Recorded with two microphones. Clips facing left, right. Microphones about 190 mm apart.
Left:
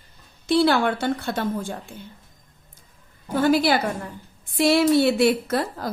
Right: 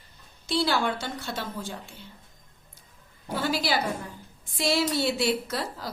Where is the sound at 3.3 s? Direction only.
50° left (ahead or behind).